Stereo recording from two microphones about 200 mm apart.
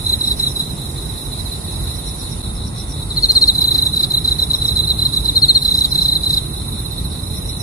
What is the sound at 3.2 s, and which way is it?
Cricket, 15° left (ahead or behind).